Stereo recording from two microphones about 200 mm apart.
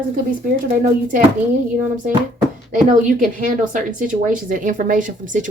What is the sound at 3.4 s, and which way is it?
Speech, 45° right (ahead or behind).